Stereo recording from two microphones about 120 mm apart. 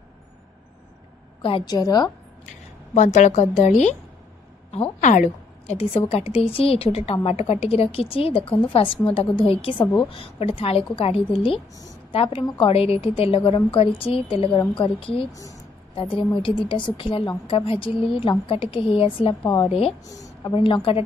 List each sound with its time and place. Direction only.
1.6 s a woman's voice: 35° left (ahead or behind)
2.4 s speech: 80° left
4.6 s a woman's voice: 55° left (ahead or behind)